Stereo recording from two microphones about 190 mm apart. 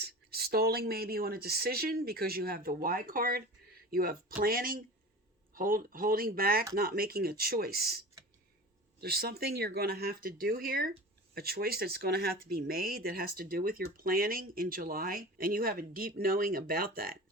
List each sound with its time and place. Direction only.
0.0 s speech: 55° right (ahead or behind)